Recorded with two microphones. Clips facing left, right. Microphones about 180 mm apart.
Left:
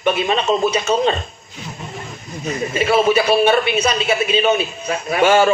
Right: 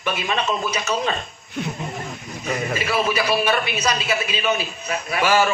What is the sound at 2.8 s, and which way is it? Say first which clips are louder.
A man's voice: left 9 dB; 25° left (ahead or behind).